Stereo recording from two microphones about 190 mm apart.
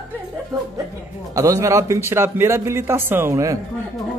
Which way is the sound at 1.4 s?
15° right (ahead or behind).